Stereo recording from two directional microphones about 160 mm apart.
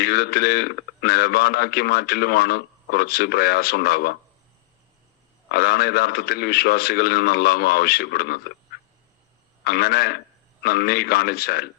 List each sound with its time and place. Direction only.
0.0 s a man's voice: 75° left (ahead or behind)
5.5 s a man's voice: 75° left (ahead or behind)
9.6 s a man's voice: 75° left (ahead or behind)